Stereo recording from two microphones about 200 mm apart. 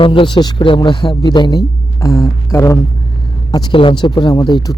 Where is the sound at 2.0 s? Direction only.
15° left (ahead or behind).